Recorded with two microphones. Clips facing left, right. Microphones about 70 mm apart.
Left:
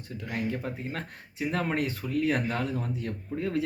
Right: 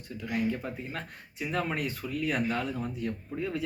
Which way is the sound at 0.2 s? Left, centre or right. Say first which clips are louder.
Right 1 dB; left.